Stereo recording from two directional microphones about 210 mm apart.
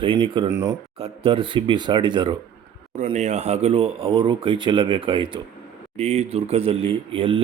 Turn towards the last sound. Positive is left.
turn(degrees=-25)  # may be behind; listen again after turning